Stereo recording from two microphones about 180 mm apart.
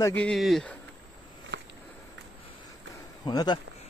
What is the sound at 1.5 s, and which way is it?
Walk, 70° right (ahead or behind).